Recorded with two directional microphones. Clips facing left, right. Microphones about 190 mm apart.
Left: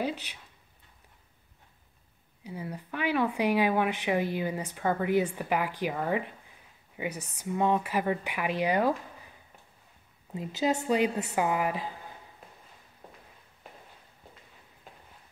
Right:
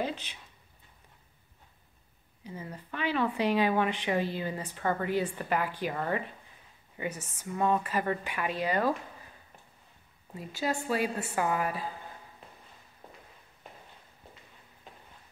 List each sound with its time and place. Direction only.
0.0 s speech: 10° left (ahead or behind)
2.4 s speech: 10° left (ahead or behind)
10.3 s speech: 20° left (ahead or behind)